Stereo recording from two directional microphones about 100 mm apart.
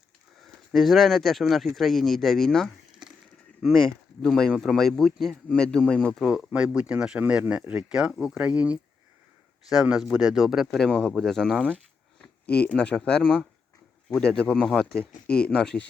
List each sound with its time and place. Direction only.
0.4 s speech: centre (ahead or behind)
6.2 s speech: 10° right (ahead or behind)
7.9 s speech: 5° right (ahead or behind)